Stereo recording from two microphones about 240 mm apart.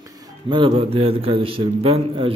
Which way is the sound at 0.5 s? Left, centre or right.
Right.